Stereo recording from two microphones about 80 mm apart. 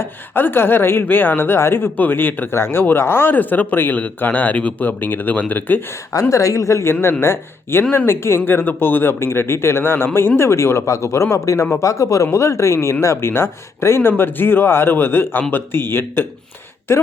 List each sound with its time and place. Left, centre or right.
0.0 s a woman's voice: left
6.1 s a woman's voice: left